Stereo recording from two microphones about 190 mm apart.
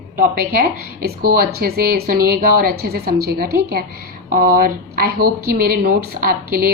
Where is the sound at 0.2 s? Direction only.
50° right (ahead or behind).